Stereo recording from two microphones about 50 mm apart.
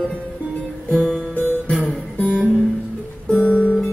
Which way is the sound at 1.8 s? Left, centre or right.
Left.